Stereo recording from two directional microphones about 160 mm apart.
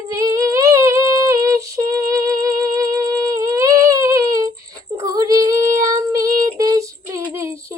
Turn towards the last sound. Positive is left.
turn(degrees=-15)  # may be behind; listen again after turning